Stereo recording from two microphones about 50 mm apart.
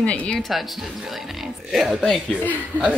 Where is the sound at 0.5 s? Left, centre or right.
Centre.